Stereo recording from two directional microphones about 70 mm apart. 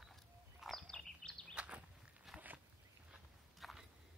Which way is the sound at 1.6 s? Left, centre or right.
Centre.